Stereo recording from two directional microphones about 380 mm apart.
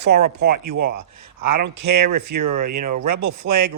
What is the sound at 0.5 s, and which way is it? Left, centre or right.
Speech, right.